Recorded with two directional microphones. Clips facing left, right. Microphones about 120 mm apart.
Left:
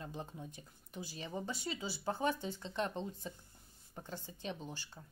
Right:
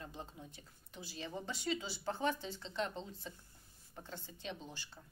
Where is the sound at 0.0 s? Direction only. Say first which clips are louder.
Left 4 dB; 15° left (ahead or behind).